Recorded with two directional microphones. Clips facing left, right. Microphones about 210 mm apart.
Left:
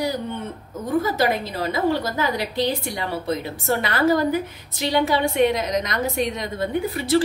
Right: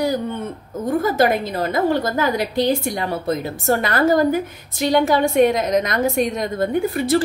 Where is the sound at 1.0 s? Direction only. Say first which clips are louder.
Right 3 dB; 50° right (ahead or behind).